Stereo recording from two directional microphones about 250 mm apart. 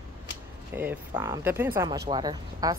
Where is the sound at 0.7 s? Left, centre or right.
Centre.